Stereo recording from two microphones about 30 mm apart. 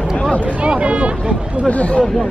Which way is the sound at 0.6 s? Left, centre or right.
Right.